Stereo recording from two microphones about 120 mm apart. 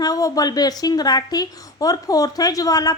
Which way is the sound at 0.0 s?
30° left (ahead or behind).